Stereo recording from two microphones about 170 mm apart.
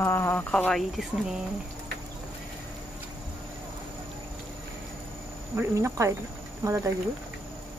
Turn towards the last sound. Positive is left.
turn(degrees=-15)  # may be behind; listen again after turning